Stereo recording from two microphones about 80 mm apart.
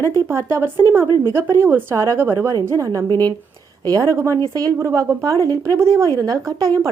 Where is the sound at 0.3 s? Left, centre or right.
Right.